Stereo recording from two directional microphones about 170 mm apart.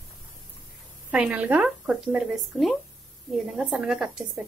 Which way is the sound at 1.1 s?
5° right (ahead or behind).